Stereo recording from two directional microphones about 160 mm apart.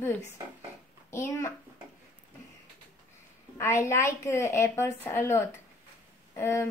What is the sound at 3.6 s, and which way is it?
A woman's voice, 15° left (ahead or behind).